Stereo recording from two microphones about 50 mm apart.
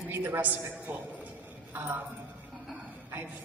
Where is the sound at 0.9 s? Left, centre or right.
Right.